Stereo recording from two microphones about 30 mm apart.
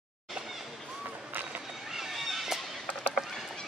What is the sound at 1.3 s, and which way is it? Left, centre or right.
Run, right.